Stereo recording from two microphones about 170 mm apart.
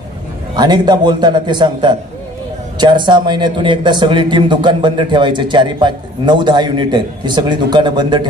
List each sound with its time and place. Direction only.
0.6 s a man's voice: 25° right (ahead or behind)